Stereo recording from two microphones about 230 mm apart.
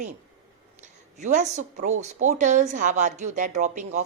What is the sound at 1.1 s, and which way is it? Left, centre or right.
A woman's voice, right.